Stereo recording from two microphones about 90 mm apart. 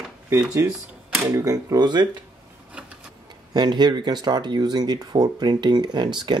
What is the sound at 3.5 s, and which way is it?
Speech, 55° right (ahead or behind).